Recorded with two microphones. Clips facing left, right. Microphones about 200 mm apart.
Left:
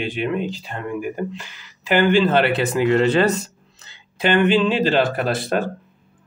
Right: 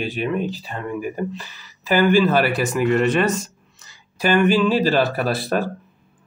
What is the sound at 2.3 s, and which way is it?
Speech, 25° left (ahead or behind).